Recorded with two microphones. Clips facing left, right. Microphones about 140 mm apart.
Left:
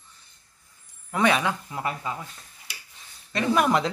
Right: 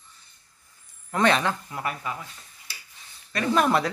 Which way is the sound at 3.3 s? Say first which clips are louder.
Even; 15° left (ahead or behind).